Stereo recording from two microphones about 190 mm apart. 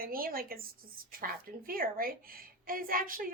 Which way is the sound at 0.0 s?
50° right (ahead or behind).